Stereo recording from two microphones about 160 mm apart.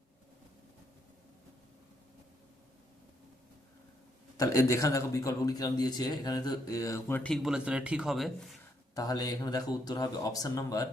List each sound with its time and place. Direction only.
4.4 s speech: 20° left (ahead or behind); by 8.4 s centre (ahead or behind)
9.0 s speech: 25° left (ahead or behind)